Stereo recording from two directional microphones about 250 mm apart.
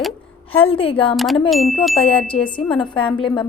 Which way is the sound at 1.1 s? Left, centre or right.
Centre.